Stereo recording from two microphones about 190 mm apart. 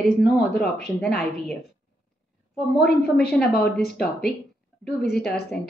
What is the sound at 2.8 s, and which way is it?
Speech, 55° left (ahead or behind).